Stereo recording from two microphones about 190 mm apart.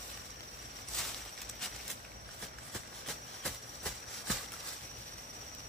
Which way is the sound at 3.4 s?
Centre (ahead or behind).